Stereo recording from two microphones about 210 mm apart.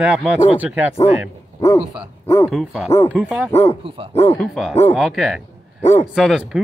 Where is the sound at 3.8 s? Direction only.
25° right (ahead or behind).